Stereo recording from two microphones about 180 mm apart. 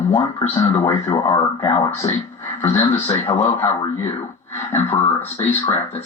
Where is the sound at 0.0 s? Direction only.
15° left (ahead or behind).